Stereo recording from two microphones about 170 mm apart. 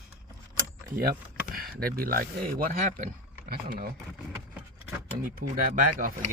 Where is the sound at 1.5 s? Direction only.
60° right (ahead or behind).